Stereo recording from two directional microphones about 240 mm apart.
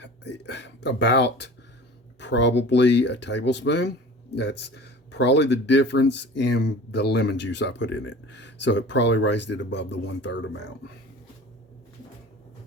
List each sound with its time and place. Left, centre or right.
0.0 s speech: left